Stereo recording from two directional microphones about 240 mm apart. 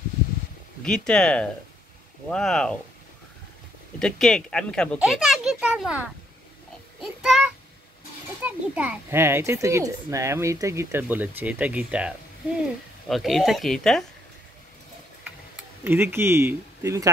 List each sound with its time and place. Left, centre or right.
0.8 s speech: centre
4.0 s speech: centre
7.0 s child singing: centre
8.5 s a child's voice: centre
13.1 s speech: centre
15.2 s tick-tock: centre